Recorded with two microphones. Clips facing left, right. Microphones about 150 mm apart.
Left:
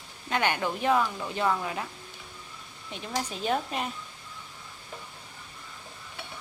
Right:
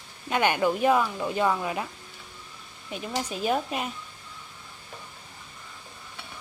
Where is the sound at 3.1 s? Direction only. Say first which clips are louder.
Right 2 dB; 10° right (ahead or behind).